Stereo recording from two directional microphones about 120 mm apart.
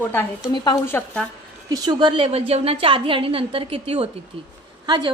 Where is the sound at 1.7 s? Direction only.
35° right (ahead or behind); by 4.2 s 55° right (ahead or behind).